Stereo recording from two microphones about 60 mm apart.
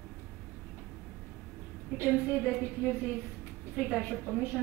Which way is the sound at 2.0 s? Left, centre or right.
Right.